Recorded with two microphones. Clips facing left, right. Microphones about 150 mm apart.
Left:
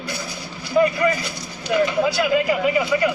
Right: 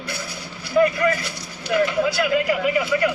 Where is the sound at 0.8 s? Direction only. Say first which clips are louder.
Even; 15° left (ahead or behind).